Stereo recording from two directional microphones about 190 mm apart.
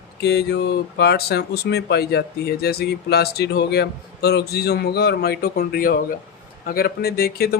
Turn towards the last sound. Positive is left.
turn(degrees=55)  # may be behind; listen again after turning